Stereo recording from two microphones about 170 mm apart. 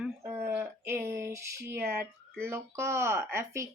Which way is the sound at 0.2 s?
15° right (ahead or behind).